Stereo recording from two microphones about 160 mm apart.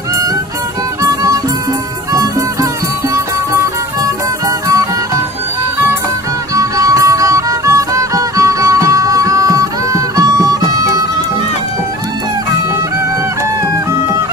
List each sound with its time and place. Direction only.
1.0 s music: 20° right (ahead or behind)
4.0 s music: 20° right (ahead or behind)
6.5 s music: 20° right (ahead or behind)